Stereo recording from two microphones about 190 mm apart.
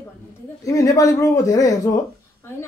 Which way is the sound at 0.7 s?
15° left (ahead or behind).